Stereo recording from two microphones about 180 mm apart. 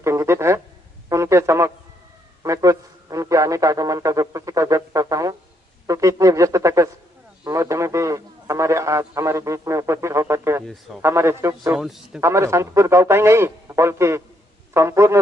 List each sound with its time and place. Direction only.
0.0 s a man's voice: 15° right (ahead or behind)
10.7 s a man's voice: centre (ahead or behind)
11.0 s a man's voice: 15° right (ahead or behind)
11.8 s a man's voice: centre (ahead or behind)
12.2 s a man's voice: 15° right (ahead or behind)